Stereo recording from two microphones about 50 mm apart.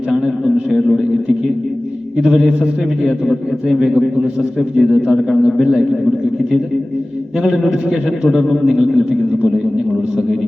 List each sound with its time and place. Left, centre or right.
2.1 s a man's voice: centre
7.4 s a man's voice: centre
8.7 s a man's voice: centre